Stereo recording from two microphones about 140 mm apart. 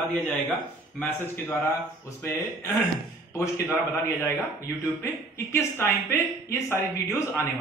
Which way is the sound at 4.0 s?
15° left (ahead or behind).